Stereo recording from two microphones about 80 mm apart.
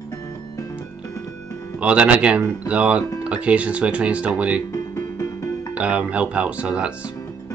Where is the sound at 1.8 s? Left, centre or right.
Centre.